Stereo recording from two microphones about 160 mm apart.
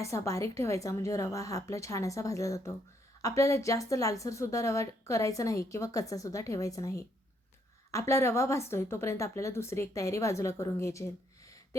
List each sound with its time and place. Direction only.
0.0 s a woman's voice: 20° left (ahead or behind)